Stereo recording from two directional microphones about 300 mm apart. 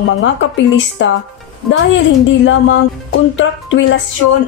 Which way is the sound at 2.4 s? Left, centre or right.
Left.